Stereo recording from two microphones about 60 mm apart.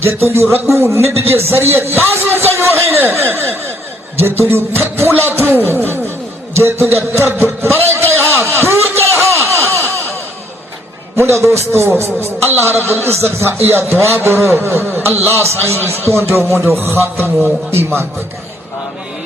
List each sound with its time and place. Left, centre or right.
0.0 s a man's voice: right
4.3 s music: right
6.6 s a man's voice: right
8.5 s a sound: right
11.2 s a man's voice: right
17.2 s music: right